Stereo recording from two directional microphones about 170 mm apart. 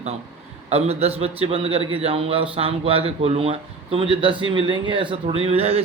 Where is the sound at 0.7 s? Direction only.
35° right (ahead or behind).